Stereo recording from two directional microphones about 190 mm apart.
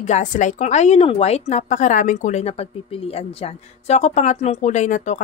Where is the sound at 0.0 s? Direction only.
40° left (ahead or behind).